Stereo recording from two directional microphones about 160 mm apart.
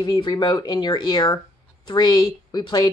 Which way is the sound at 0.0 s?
25° left (ahead or behind).